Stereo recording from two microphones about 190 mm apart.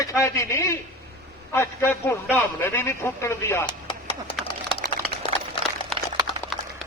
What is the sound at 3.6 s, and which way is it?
Chopping, 25° left (ahead or behind).